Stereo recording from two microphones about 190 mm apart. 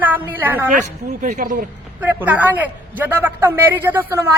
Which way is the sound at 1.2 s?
40° right (ahead or behind).